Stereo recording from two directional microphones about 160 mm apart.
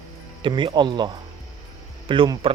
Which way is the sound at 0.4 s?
30° right (ahead or behind).